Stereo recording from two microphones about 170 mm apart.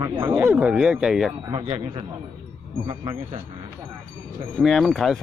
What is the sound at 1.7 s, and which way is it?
Speech, 35° right (ahead or behind).